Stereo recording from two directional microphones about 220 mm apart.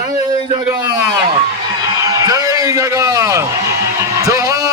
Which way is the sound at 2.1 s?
15° right (ahead or behind).